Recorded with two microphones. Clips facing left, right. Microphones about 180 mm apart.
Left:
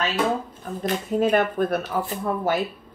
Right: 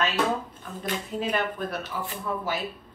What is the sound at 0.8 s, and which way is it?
Speech, 50° left (ahead or behind).